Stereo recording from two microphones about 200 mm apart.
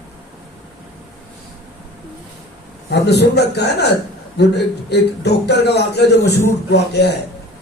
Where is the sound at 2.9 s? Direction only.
55° left (ahead or behind).